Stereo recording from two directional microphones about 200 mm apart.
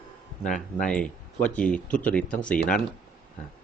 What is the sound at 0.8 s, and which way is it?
Speech, 5° left (ahead or behind).